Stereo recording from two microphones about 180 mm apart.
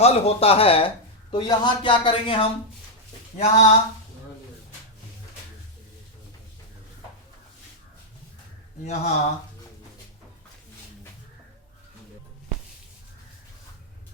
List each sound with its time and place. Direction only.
0.0 s speech: 35° left (ahead or behind)
8.8 s speech: 40° left (ahead or behind)